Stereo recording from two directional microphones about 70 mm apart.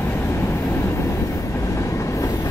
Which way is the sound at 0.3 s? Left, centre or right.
Left.